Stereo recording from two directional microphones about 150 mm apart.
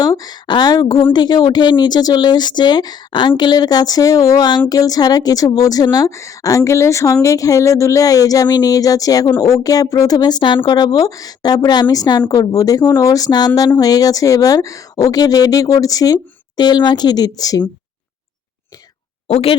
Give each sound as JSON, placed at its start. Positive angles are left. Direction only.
{"t": 0.0, "sound": "a woman's voice", "side_deg": 25}
{"t": 19.3, "sound": "a woman's voice", "side_deg": 40}